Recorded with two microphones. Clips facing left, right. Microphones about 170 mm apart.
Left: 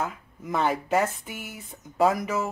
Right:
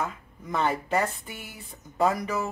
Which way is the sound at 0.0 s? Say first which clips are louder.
Left 1 dB; 5° left (ahead or behind).